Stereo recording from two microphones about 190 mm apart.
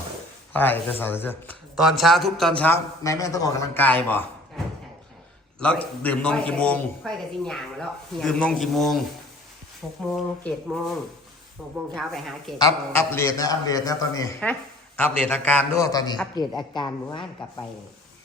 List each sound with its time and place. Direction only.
0.5 s a man's voice: 10° left (ahead or behind)
1.7 s a man's voice: centre (ahead or behind)
3.0 s a man's voice: 15° left (ahead or behind); by 10.0 s centre (ahead or behind)
11.9 s a man's voice: centre (ahead or behind)
12.5 s a man's voice: 15° left (ahead or behind)